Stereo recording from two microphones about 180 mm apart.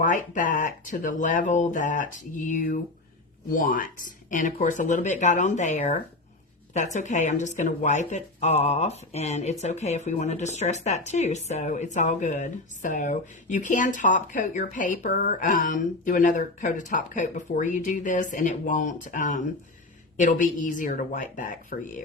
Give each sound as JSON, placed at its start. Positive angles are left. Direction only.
{"t": 0.0, "sound": "speech", "side_deg": 50}